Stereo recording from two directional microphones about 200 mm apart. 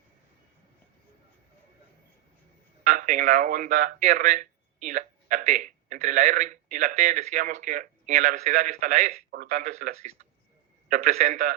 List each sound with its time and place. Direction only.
2.8 s speech: 40° right (ahead or behind)